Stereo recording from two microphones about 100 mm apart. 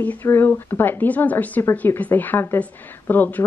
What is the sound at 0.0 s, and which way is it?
Speech, 15° left (ahead or behind).